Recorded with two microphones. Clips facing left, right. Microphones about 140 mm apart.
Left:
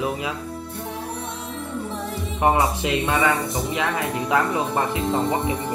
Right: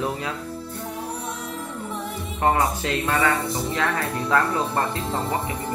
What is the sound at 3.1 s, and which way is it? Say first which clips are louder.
Speech: right 1 dB; 25° left (ahead or behind).